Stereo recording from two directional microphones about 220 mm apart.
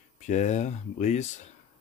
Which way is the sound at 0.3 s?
30° left (ahead or behind).